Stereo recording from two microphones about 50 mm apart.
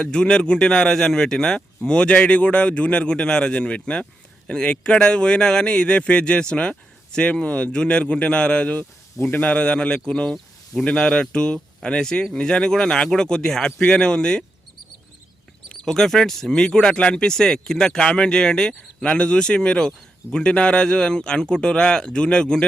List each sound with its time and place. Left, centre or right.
0.0 s a man's voice: centre
15.7 s a man's voice: centre